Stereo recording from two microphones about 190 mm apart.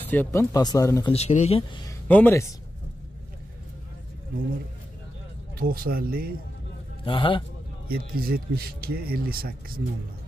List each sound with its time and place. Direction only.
0.1 s speech: 10° left (ahead or behind)
1.1 s speech: 35° left (ahead or behind)
1.9 s speech: 10° left (ahead or behind)
5.6 s speech: 50° right (ahead or behind)
7.1 s a man's voice: 25° left (ahead or behind)
7.9 s speech: 50° right (ahead or behind)